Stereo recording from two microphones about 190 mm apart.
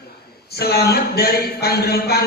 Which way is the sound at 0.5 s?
55° left (ahead or behind).